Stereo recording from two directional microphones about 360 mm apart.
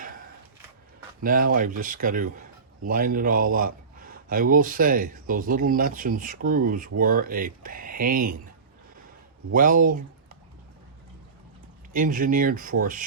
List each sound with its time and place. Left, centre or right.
1.2 s a man's voice: right
9.5 s speech: right
11.9 s a man's voice: right